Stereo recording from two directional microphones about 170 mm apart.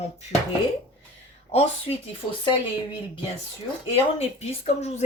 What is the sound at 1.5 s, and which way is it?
Speech, 35° left (ahead or behind).